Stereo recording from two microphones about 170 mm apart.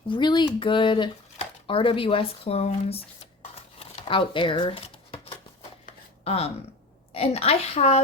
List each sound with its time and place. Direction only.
0.1 s speech: 25° left (ahead or behind)
3.5 s a sound: 30° left (ahead or behind)
6.2 s speech: 35° left (ahead or behind)